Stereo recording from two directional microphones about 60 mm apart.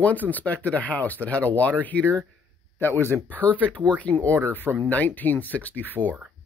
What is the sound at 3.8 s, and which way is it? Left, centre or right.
Speech, left.